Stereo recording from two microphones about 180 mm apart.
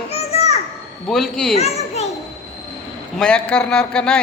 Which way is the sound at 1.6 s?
35° left (ahead or behind).